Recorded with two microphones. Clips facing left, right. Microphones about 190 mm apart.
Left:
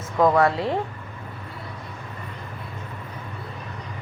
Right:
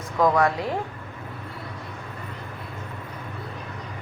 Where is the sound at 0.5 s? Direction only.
30° left (ahead or behind).